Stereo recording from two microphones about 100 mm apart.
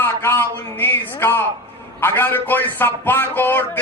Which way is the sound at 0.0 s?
20° left (ahead or behind).